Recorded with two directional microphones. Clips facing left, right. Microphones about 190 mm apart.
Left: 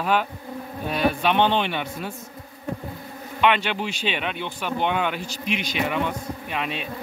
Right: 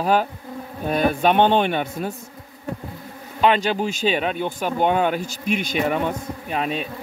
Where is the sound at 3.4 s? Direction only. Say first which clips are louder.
Right 3 dB; 35° right (ahead or behind).